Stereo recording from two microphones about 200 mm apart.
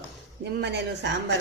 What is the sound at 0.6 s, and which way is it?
Speech, 60° right (ahead or behind).